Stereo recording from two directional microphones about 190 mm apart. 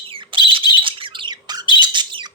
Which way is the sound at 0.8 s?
25° right (ahead or behind).